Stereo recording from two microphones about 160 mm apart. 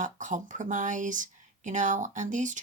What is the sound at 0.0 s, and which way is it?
Speech, 50° right (ahead or behind).